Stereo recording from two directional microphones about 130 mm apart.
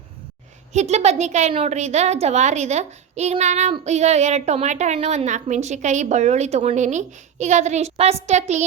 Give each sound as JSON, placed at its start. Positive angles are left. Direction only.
{"t": 0.7, "sound": "a child's voice", "side_deg": -60}